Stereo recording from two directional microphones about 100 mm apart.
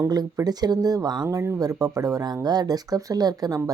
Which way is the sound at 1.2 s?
25° right (ahead or behind).